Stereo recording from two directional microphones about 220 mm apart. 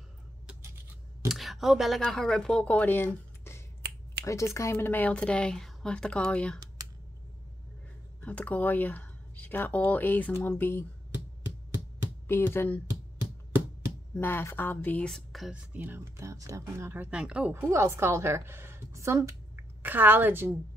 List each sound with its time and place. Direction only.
1.3 s speech: centre (ahead or behind)
3.8 s finger snapping: 45° right (ahead or behind)
4.2 s speech: 15° left (ahead or behind)
8.2 s speech: 5° left (ahead or behind)
12.5 s speech: 5° left (ahead or behind)
14.1 s a woman's voice: 10° left (ahead or behind); by 20.5 s 10° right (ahead or behind)